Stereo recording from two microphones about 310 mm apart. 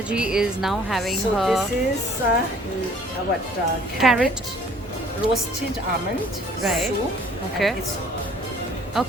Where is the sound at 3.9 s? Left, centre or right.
Centre.